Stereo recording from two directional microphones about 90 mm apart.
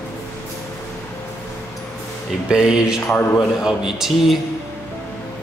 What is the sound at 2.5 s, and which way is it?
A man's voice, 10° right (ahead or behind).